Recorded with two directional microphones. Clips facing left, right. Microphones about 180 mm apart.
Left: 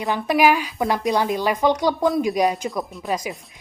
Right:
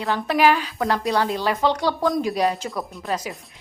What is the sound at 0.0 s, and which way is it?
A woman's voice, 15° left (ahead or behind).